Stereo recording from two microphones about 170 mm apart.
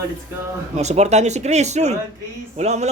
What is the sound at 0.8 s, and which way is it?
A man's voice, 40° right (ahead or behind).